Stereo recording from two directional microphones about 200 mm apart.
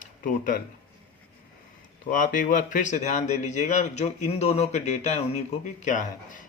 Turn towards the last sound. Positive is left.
turn(degrees=40)  # may be behind; listen again after turning